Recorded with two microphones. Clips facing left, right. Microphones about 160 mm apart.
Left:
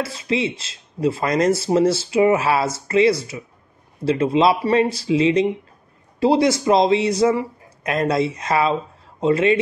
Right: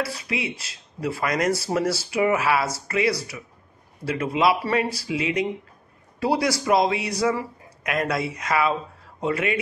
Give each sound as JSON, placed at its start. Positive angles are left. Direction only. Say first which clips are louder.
{"t": 0.0, "sound": "speech", "louder": "left 6 dB", "side_deg": 25}